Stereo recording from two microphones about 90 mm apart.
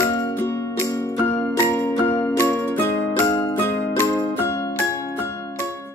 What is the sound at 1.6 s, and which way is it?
Music, 30° left (ahead or behind).